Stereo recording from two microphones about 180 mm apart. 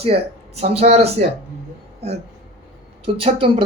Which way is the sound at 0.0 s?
35° right (ahead or behind).